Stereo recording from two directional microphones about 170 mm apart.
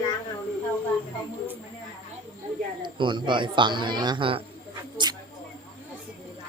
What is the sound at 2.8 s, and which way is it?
Speech, 30° right (ahead or behind).